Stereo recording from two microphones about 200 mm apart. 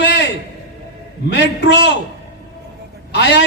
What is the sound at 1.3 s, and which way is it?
Speech, 60° left (ahead or behind).